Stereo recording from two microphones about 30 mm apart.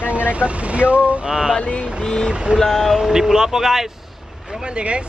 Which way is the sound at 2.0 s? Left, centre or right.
Left.